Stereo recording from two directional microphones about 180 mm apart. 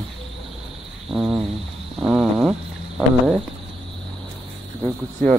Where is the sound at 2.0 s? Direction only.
5° right (ahead or behind).